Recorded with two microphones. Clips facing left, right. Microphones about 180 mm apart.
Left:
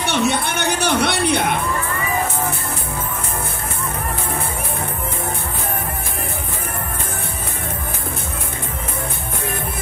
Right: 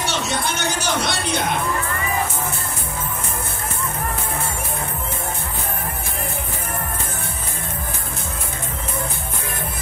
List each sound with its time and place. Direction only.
0.0 s music: 60° left (ahead or behind)